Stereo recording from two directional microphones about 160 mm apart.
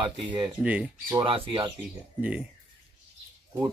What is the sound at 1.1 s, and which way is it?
Speech, 35° right (ahead or behind).